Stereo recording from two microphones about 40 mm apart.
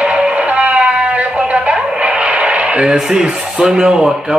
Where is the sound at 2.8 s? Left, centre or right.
Centre.